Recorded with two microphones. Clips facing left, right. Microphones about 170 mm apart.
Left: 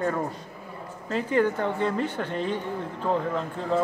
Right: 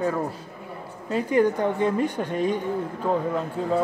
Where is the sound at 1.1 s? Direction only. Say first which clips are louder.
Right 3 dB; 15° right (ahead or behind).